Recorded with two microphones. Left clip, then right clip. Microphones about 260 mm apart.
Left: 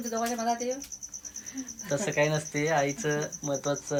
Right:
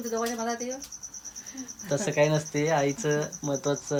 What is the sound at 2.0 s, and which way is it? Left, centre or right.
Speech, centre.